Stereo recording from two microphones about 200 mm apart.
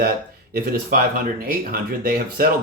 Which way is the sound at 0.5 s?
50° right (ahead or behind).